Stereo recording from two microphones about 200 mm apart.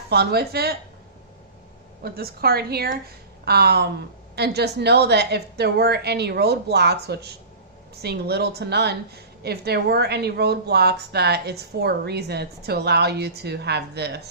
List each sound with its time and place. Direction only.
0.1 s a woman's voice: 50° right (ahead or behind)
2.0 s a woman's voice: 50° right (ahead or behind)